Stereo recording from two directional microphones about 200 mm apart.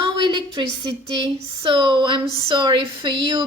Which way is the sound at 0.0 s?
25° right (ahead or behind).